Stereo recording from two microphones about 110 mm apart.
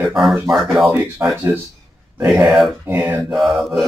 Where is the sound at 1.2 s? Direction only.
20° right (ahead or behind).